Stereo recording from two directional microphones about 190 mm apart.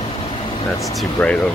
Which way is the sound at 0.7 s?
15° left (ahead or behind).